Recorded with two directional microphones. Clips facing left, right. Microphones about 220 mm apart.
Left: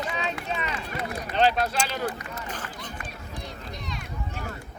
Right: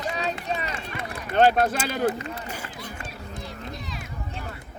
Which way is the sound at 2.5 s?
10° right (ahead or behind).